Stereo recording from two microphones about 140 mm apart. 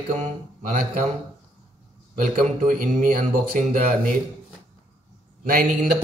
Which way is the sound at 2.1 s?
80° right.